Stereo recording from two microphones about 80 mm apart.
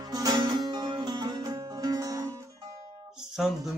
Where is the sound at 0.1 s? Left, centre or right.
Right.